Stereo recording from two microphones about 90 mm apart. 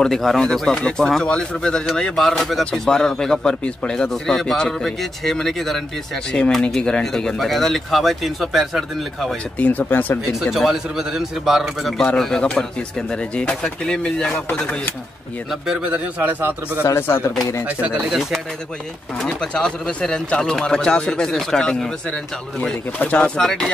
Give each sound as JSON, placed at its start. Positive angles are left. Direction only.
{"t": 0.0, "sound": "a man's voice", "side_deg": 5}
{"t": 9.6, "sound": "speech", "side_deg": 20}
{"t": 10.4, "sound": "a man's voice", "side_deg": 0}
{"t": 15.6, "sound": "a man's voice", "side_deg": -10}
{"t": 16.8, "sound": "speech", "side_deg": 30}
{"t": 19.1, "sound": "speech", "side_deg": 10}